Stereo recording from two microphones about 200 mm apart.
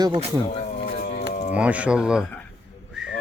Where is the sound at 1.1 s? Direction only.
40° left (ahead or behind).